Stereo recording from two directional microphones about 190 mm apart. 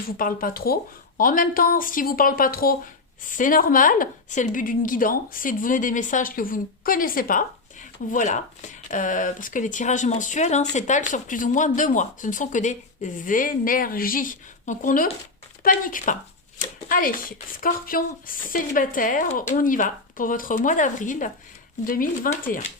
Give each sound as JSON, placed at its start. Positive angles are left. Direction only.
{"t": 0.2, "sound": "a woman's voice", "side_deg": 45}